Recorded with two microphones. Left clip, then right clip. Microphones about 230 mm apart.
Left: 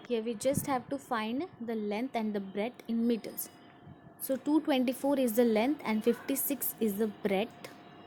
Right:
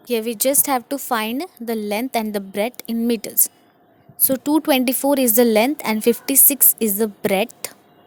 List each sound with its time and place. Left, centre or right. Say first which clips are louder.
0.1 s a woman's voice: right 11 dB; right